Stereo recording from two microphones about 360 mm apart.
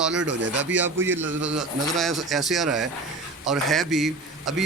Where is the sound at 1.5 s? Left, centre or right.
Centre.